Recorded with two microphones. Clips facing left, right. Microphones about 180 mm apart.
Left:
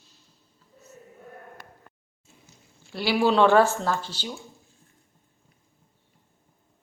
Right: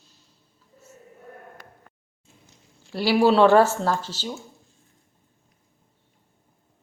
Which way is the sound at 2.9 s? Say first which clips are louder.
Right 4 dB; 40° right (ahead or behind).